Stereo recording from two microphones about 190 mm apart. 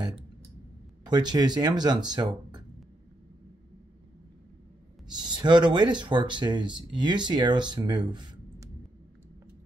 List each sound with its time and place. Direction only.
1.0 s speech: 20° right (ahead or behind)
5.0 s speech: 20° right (ahead or behind)